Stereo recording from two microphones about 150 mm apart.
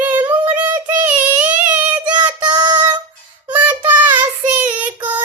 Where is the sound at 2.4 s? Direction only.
30° right (ahead or behind).